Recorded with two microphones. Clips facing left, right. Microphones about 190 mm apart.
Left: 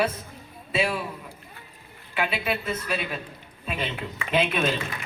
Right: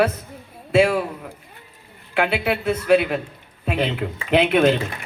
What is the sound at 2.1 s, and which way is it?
Speech, 70° right (ahead or behind).